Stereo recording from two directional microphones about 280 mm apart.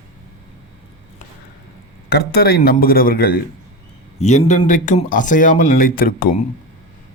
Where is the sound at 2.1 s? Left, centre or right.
Left.